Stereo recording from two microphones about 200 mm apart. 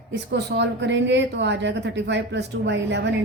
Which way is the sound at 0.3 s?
55° right (ahead or behind).